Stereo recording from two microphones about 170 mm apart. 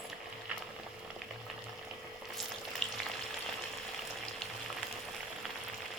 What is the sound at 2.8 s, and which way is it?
Frying, 5° left (ahead or behind).